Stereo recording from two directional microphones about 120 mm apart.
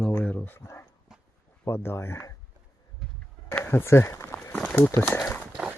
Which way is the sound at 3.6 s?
20° left (ahead or behind).